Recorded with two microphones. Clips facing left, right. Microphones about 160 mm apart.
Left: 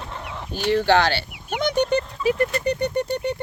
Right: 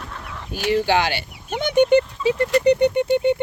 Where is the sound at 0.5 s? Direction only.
15° right (ahead or behind).